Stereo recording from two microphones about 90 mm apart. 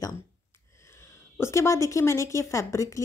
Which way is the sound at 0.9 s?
30° left (ahead or behind).